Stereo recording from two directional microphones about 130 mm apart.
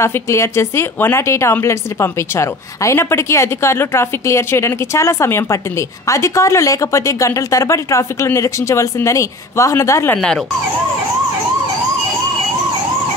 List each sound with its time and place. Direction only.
0.0 s a woman's voice: 20° left (ahead or behind)
10.1 s speech: 5° left (ahead or behind)